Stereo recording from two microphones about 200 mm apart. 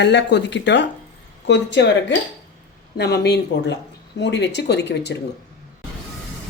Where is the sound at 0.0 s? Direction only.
60° left (ahead or behind).